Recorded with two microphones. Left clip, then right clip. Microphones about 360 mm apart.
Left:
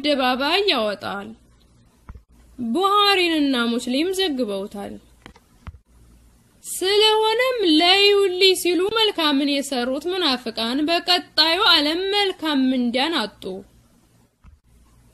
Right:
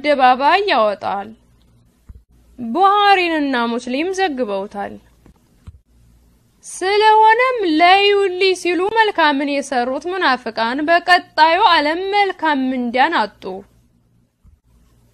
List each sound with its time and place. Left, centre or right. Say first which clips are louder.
0.0 s a woman's voice: right 8 dB; centre
2.7 s a woman's voice: right 5 dB; centre
6.8 s a woman's voice: right 6 dB; centre